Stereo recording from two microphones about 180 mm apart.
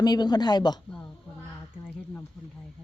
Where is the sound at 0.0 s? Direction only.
20° left (ahead or behind).